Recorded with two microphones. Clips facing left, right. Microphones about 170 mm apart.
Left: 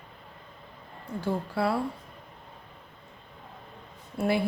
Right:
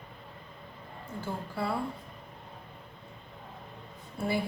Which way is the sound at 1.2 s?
75° left (ahead or behind).